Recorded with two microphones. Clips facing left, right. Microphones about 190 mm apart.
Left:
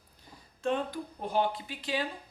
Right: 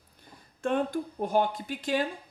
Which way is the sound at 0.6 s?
50° right (ahead or behind).